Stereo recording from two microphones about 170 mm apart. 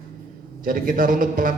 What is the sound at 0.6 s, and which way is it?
Speech, 55° right (ahead or behind).